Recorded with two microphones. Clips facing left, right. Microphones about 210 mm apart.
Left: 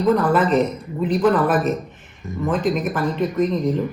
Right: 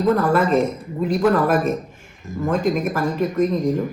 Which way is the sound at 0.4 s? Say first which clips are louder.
Even; 45° right (ahead or behind).